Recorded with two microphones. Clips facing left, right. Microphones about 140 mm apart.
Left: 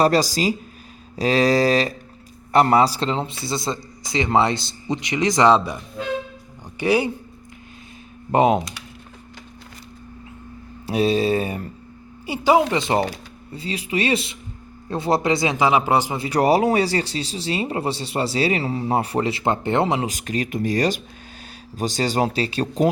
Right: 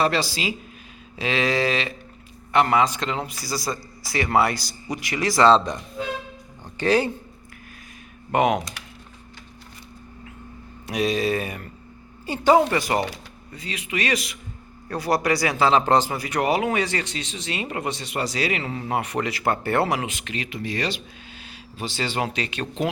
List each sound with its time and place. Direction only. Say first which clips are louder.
0.0 s a man's voice: left 5 dB; 40° left (ahead or behind); by 7.1 s 10° left (ahead or behind)
8.3 s a man's voice: left 3 dB; 30° left (ahead or behind)
10.8 s a man's voice: left 4 dB; 30° left (ahead or behind)
12.2 s speech: even; 10° left (ahead or behind)
12.7 s a man's voice: left 2 dB; 25° left (ahead or behind)
16.1 s speech: left 5 dB; 30° left (ahead or behind)
20.1 s speech: left 7 dB; 40° left (ahead or behind)